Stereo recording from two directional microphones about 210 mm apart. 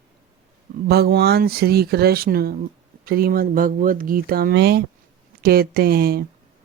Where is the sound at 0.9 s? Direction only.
50° right (ahead or behind).